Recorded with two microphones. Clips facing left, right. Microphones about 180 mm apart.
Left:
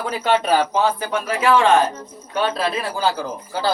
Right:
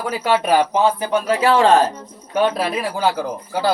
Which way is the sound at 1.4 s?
35° right (ahead or behind).